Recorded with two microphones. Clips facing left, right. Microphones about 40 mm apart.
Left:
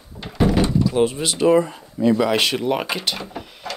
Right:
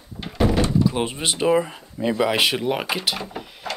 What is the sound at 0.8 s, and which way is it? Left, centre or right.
Speech, right.